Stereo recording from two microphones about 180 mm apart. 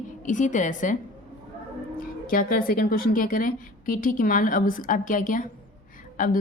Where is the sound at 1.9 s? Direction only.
50° left (ahead or behind).